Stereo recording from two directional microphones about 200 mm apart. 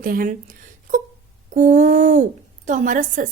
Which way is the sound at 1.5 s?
40° right (ahead or behind).